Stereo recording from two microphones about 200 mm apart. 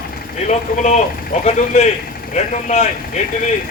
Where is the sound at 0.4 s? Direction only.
35° left (ahead or behind).